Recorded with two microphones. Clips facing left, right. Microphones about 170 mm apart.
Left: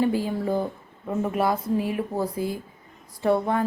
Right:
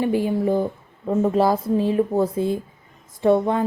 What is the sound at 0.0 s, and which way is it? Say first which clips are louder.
A woman's voice: right 3 dB; 20° right (ahead or behind).